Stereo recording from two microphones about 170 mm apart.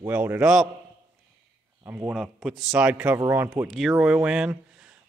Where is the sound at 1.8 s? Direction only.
10° right (ahead or behind).